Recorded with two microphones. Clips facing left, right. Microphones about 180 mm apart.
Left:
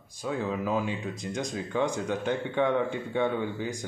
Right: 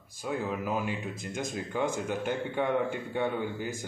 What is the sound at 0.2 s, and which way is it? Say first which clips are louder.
Speech: left 2 dB; 10° right (ahead or behind).